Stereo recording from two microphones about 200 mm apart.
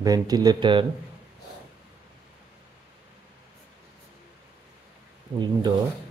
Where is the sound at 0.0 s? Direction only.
20° right (ahead or behind).